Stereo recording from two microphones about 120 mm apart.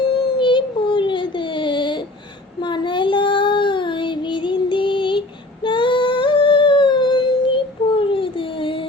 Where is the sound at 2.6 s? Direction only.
40° left (ahead or behind).